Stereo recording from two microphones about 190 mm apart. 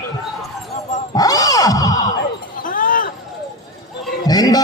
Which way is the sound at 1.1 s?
20° left (ahead or behind).